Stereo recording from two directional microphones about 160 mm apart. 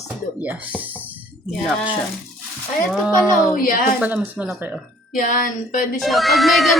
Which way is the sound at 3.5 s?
60° left (ahead or behind).